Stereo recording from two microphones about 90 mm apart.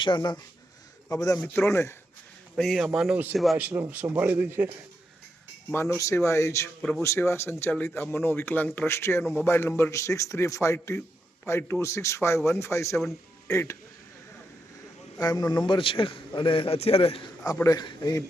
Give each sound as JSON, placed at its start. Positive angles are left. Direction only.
{"t": 0.0, "sound": "speech", "side_deg": 60}
{"t": 1.1, "sound": "a man's voice", "side_deg": 40}
{"t": 1.5, "sound": "speech", "side_deg": 30}
{"t": 2.6, "sound": "speech", "side_deg": 0}
{"t": 3.6, "sound": "speech", "side_deg": -20}
{"t": 5.7, "sound": "a man's voice", "side_deg": 25}
{"t": 8.9, "sound": "a man's voice", "side_deg": 30}
{"t": 15.2, "sound": "a man's voice", "side_deg": 50}
{"t": 17.7, "sound": "a man's voice", "side_deg": 50}